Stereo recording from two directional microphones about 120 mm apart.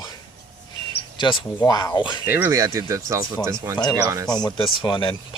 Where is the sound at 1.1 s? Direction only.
40° left (ahead or behind).